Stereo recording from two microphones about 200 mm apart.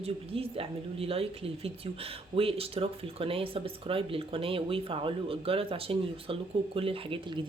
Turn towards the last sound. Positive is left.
turn(degrees=-25)  # may be behind; listen again after turning